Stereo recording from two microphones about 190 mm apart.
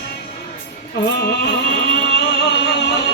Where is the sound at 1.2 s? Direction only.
65° left (ahead or behind).